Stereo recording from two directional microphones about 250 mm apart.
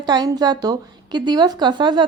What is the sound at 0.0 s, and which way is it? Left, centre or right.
A woman's voice, centre.